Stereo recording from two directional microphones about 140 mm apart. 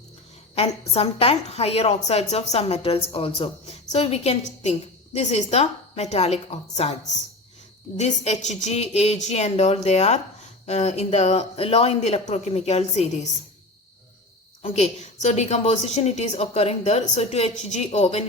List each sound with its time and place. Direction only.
0.5 s a woman's voice: 45° left (ahead or behind)
7.9 s a woman's voice: 50° left (ahead or behind)
14.6 s a woman's voice: 55° left (ahead or behind)